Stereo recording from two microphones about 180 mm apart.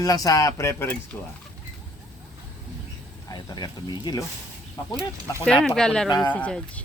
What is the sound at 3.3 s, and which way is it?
Speech, 25° left (ahead or behind).